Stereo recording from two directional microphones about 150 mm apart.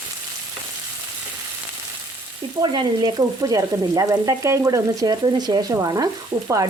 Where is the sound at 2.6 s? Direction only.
30° right (ahead or behind).